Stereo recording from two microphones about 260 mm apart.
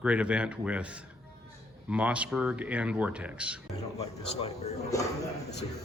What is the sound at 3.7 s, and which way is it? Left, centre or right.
Speech, centre.